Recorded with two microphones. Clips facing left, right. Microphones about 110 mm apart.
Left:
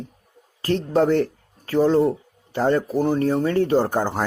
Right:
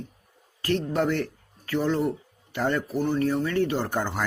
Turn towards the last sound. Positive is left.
turn(degrees=35)  # may be behind; listen again after turning